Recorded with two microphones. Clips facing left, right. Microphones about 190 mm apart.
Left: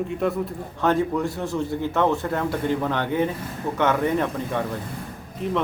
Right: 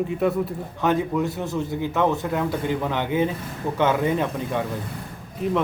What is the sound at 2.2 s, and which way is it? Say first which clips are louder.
A man's voice: even; 5° right (ahead or behind).